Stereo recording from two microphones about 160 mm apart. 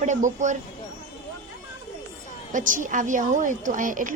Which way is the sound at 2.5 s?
55° right (ahead or behind).